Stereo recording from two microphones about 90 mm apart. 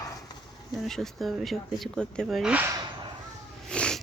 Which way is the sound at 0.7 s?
Centre (ahead or behind).